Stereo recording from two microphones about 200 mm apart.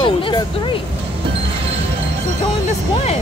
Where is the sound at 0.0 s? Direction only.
25° left (ahead or behind).